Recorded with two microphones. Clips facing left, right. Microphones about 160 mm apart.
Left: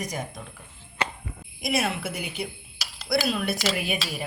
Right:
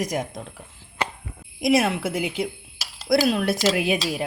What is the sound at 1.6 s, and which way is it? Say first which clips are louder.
Speech: right 7 dB; 90° right.